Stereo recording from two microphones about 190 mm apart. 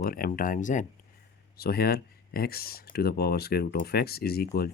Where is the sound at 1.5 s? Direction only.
55° left (ahead or behind).